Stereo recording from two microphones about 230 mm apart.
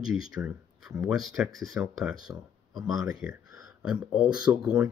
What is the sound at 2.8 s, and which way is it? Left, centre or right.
Speech, centre.